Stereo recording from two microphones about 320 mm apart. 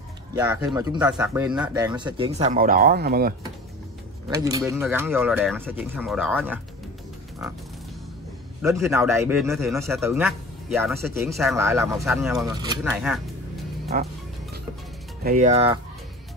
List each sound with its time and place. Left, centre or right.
0.3 s a man's voice: centre; by 3.3 s right
4.3 s speech: centre
8.6 s a man's voice: centre
12.4 s a man's voice: centre
13.9 s speech: right
15.2 s speech: right